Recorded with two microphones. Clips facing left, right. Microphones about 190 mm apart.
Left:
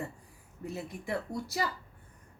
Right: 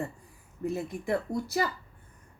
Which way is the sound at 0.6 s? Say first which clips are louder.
Right 7 dB; 50° right (ahead or behind).